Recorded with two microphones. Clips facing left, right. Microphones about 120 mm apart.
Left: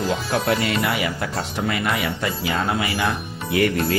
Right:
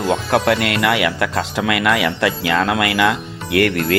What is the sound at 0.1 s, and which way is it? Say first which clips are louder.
Speech: right 8 dB; 70° right (ahead or behind).